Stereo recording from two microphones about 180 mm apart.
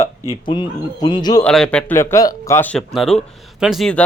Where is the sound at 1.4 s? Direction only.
5° left (ahead or behind).